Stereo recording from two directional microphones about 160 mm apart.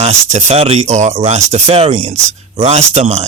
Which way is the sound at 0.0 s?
45° right (ahead or behind).